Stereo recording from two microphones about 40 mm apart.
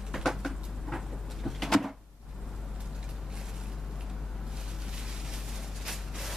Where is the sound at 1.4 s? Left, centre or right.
Centre.